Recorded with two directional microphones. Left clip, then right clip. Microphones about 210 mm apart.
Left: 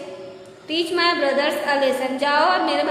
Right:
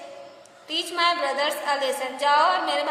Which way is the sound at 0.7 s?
35° right (ahead or behind).